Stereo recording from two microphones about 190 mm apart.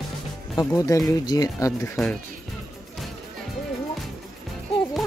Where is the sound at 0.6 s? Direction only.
15° left (ahead or behind).